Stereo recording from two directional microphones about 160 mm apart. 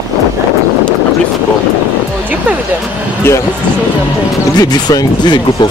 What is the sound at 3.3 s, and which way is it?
Speech, 15° left (ahead or behind).